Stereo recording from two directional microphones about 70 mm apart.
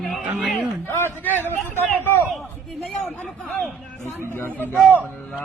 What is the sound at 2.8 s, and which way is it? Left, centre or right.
Speech, left.